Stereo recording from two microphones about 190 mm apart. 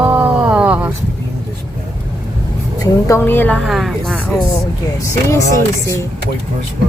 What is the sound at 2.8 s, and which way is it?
Speech, 15° left (ahead or behind).